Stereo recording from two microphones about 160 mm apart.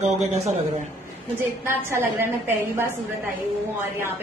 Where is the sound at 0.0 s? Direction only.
45° right (ahead or behind).